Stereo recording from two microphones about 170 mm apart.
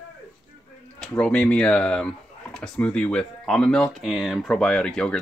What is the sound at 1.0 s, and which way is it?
Speech, 5° left (ahead or behind).